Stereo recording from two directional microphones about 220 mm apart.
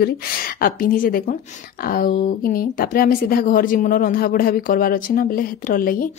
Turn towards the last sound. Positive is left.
turn(degrees=40)  # may be behind; listen again after turning